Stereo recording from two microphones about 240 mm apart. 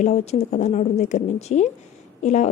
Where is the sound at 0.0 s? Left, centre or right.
Left.